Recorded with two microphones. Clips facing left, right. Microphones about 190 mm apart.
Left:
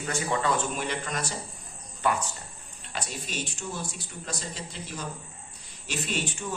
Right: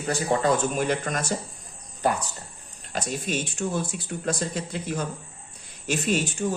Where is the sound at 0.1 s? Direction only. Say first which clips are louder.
Right 5 dB; 35° right (ahead or behind).